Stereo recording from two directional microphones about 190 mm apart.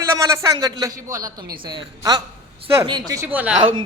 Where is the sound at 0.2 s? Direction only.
15° right (ahead or behind).